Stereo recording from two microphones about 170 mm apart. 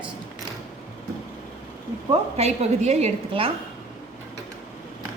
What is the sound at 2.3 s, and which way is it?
A woman's voice, 40° right (ahead or behind).